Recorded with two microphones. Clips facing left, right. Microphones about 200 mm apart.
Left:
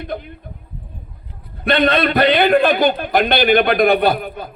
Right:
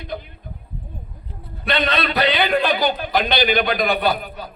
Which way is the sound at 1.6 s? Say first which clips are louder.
Left 6 dB; 55° left (ahead or behind).